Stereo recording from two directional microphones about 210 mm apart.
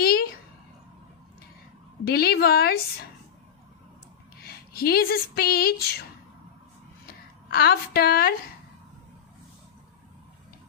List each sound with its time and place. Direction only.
0.0 s a sound: 45° left (ahead or behind)
2.0 s a woman's voice: 50° left (ahead or behind)
4.4 s speech: 45° left (ahead or behind)
7.5 s a woman's voice: 45° left (ahead or behind)